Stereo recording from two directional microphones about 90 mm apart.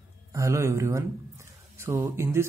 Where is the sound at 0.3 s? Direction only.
35° right (ahead or behind).